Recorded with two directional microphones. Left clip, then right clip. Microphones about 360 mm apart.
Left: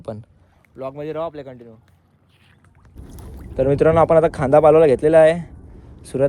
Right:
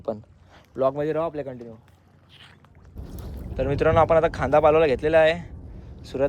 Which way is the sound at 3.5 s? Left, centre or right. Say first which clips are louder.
Left 5 dB; centre.